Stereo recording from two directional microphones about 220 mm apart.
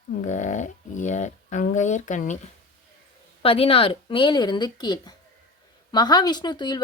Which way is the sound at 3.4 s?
25° left (ahead or behind).